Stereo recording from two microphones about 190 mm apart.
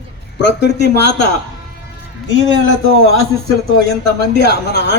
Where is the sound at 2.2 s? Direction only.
85° left.